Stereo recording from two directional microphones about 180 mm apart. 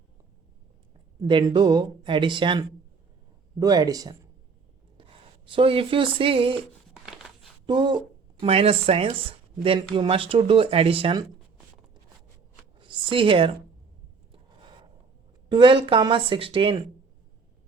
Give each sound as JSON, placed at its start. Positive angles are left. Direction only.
{"t": 1.2, "sound": "speech", "side_deg": -25}
{"t": 7.0, "sound": "a sound", "side_deg": 0}
{"t": 7.7, "sound": "speech", "side_deg": -25}
{"t": 12.8, "sound": "speech", "side_deg": -30}
{"t": 14.3, "sound": "a sound", "side_deg": -25}
{"t": 15.4, "sound": "speech", "side_deg": -25}